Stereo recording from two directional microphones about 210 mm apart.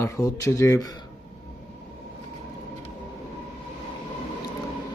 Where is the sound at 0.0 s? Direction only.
15° left (ahead or behind).